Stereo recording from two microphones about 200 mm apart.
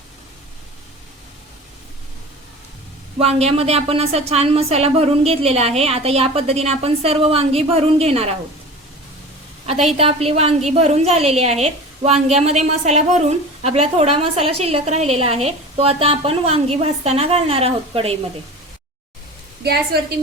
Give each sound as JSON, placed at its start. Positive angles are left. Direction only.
{"t": 3.2, "sound": "a woman's voice", "side_deg": -30}
{"t": 9.6, "sound": "a woman's voice", "side_deg": -30}
{"t": 19.6, "sound": "a woman's voice", "side_deg": -55}